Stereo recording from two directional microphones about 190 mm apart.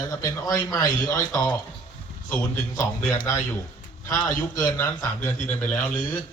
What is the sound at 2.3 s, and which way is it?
A man's voice, 15° left (ahead or behind).